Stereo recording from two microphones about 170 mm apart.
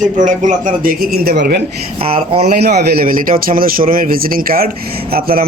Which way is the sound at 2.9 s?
55° right (ahead or behind).